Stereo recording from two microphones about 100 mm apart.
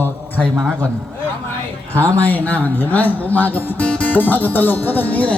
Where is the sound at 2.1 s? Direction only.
15° left (ahead or behind).